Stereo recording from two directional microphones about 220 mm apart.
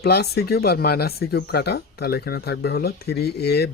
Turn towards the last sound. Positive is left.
turn(degrees=50)  # may be behind; listen again after turning